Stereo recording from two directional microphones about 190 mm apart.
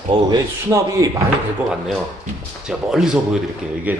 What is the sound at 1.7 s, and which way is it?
Speech, 5° right (ahead or behind).